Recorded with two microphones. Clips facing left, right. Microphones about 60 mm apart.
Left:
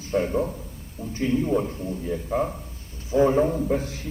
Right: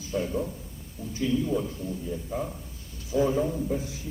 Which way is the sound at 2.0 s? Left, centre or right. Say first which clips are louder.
Left 9 dB; left.